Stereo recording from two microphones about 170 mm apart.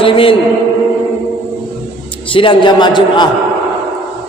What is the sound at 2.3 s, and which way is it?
Speech, 30° left (ahead or behind).